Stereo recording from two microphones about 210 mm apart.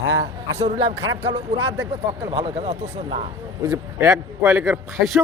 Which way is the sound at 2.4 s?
30° right (ahead or behind).